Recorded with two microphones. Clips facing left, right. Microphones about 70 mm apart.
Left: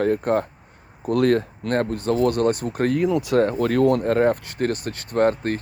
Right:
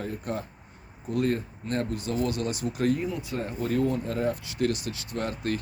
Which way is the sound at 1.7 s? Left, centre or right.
Left.